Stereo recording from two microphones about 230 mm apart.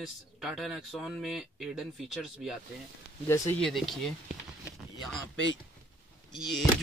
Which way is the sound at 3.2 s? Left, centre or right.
Centre.